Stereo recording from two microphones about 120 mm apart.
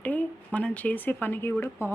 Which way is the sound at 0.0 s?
15° left (ahead or behind).